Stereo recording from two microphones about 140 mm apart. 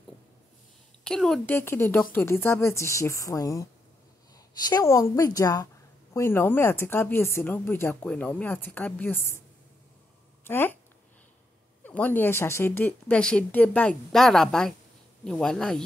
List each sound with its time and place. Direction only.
1.0 s a woman's voice: 5° left (ahead or behind)
1.4 s a woman's voice: 15° left (ahead or behind)
4.6 s a woman's voice: 25° left (ahead or behind)
10.4 s speech: 15° left (ahead or behind)
11.8 s speech: 10° left (ahead or behind)